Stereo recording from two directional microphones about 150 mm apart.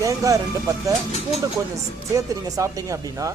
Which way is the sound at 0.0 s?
20° right (ahead or behind).